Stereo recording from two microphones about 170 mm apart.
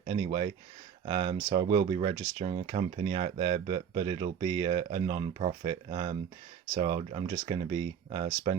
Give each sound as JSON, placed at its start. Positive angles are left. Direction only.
{"t": 0.0, "sound": "speech", "side_deg": -30}